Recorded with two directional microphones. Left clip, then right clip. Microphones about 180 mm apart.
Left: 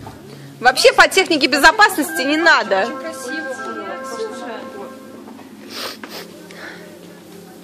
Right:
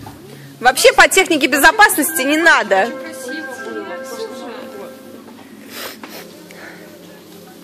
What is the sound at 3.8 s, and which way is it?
Music, 25° left (ahead or behind).